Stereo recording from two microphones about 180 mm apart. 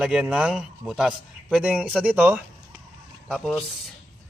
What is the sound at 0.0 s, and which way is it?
Speech, 5° right (ahead or behind).